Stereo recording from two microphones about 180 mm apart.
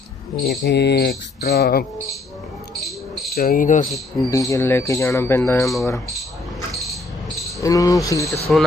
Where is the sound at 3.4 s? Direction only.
50° left (ahead or behind).